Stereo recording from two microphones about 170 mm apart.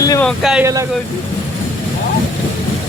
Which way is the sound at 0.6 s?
20° right (ahead or behind).